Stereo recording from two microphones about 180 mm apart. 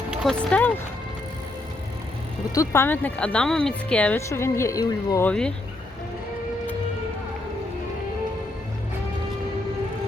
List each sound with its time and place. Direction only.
0.2 s speech: 5° left (ahead or behind)
2.6 s speech: 15° left (ahead or behind)
5.2 s speech: 5° left (ahead or behind)